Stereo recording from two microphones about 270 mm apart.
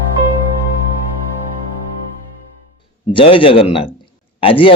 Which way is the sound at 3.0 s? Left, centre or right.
Centre.